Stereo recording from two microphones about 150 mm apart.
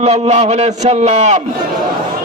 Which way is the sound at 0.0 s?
50° right (ahead or behind).